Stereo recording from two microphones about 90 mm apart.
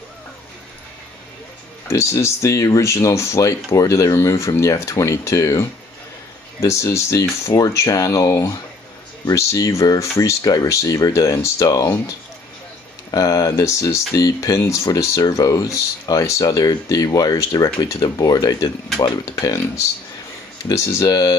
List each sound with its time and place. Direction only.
1.9 s speech: 35° left (ahead or behind)
13.1 s speech: 40° left (ahead or behind)
19.4 s speech: 35° left (ahead or behind)